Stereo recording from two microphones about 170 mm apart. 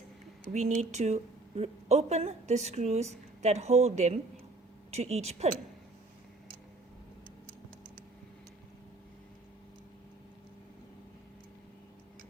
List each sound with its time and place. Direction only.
0.5 s a woman's voice: 45° right (ahead or behind)